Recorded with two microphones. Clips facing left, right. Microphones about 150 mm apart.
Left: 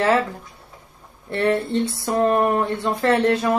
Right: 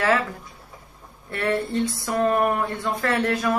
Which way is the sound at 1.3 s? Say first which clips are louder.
Left 4 dB; 30° left (ahead or behind).